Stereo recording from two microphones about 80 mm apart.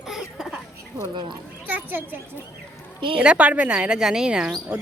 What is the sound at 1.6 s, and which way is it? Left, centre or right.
A child's voice, right.